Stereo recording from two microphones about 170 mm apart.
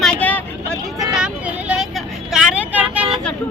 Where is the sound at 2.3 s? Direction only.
5° right (ahead or behind).